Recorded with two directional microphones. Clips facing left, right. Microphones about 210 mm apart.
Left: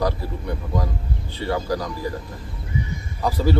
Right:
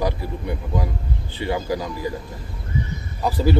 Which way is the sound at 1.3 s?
20° right (ahead or behind).